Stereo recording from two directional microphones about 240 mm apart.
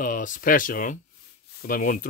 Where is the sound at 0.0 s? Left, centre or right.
Left.